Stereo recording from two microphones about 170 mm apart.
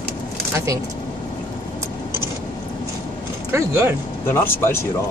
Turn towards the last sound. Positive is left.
turn(degrees=15)  # may be behind; listen again after turning